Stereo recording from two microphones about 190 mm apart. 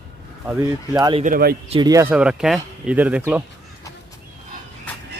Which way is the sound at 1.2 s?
50° right (ahead or behind).